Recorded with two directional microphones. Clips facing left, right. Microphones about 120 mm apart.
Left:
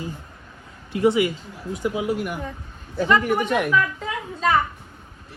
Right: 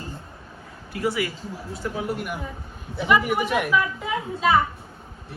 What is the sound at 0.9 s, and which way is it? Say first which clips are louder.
Speech: left 7 dB; 20° left (ahead or behind).